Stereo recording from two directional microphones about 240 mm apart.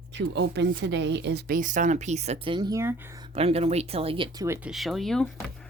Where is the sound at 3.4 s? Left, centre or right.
Right.